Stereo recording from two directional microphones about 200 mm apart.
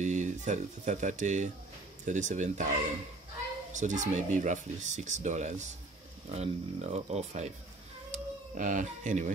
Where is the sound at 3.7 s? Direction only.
40° right (ahead or behind).